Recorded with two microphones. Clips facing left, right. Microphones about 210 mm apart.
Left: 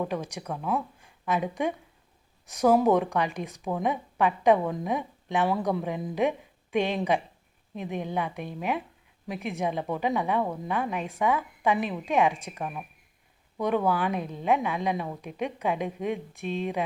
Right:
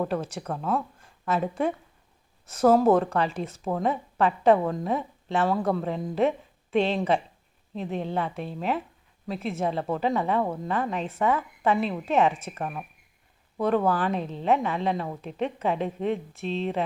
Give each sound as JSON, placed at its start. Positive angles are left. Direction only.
{"t": 0.0, "sound": "a woman's voice", "side_deg": 15}